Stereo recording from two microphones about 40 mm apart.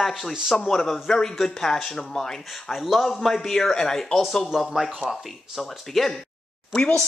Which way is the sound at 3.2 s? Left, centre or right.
Centre.